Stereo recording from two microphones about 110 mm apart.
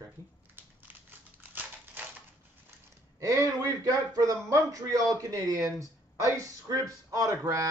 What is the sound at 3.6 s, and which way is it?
Speech, 30° right (ahead or behind).